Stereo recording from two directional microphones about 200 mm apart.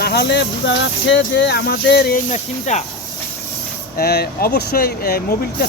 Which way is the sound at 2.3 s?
35° left (ahead or behind).